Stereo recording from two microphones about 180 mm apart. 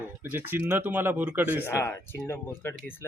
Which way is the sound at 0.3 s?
10° right (ahead or behind).